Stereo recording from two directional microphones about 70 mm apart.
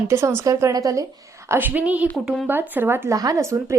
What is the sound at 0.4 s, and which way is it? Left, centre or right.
Speech, right.